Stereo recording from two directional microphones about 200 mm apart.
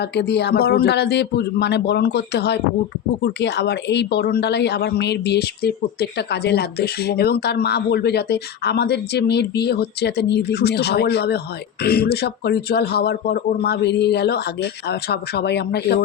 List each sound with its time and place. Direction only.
0.0 s speech: 55° left (ahead or behind)